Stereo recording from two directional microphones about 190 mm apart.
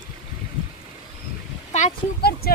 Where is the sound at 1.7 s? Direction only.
35° left (ahead or behind).